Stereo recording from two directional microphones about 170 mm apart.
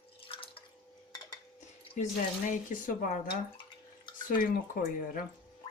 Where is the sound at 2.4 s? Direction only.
55° left (ahead or behind).